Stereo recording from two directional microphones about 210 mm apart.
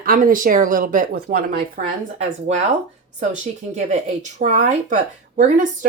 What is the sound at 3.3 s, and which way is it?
Speech, 35° right (ahead or behind).